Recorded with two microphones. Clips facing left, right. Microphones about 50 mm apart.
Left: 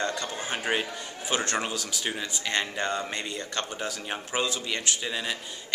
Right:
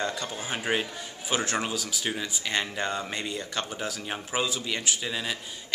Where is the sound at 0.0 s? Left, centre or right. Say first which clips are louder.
Left 1 dB; centre.